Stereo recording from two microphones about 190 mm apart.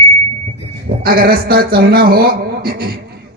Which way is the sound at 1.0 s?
50° right (ahead or behind).